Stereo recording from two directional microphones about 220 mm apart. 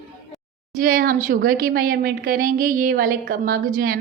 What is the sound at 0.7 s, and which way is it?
A woman's voice, 40° right (ahead or behind).